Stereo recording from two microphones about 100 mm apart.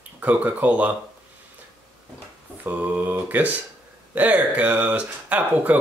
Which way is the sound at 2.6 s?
15° right (ahead or behind).